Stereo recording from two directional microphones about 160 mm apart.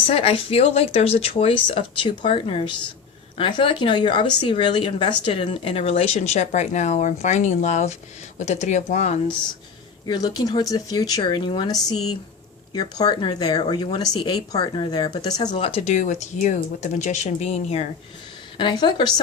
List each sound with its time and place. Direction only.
0.1 s speech: 35° left (ahead or behind)
10.1 s speech: 25° left (ahead or behind)
15.5 s speech: 40° left (ahead or behind)
18.5 s speech: 30° left (ahead or behind)